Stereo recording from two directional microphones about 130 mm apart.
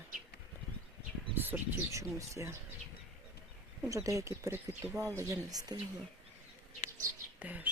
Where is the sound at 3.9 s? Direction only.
25° right (ahead or behind).